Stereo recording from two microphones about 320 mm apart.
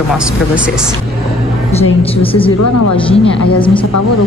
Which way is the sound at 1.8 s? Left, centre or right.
Centre.